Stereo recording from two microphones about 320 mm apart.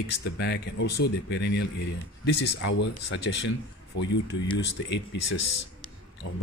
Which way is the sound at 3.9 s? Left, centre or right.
Left.